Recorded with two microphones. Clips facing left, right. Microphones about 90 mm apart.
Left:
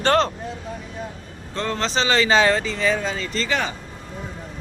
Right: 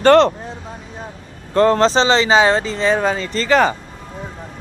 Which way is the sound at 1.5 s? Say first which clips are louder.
Right 11 dB; 45° right (ahead or behind).